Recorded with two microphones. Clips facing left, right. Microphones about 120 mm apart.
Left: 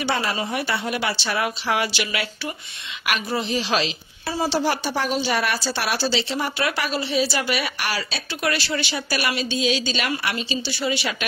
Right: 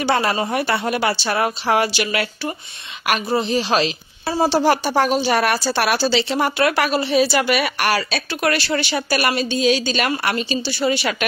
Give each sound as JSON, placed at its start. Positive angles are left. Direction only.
{"t": 0.0, "sound": "speech", "side_deg": -50}
{"t": 3.3, "sound": "a woman's voice", "side_deg": -35}